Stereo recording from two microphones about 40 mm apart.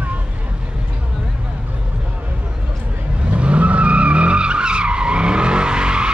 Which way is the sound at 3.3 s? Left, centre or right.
Right.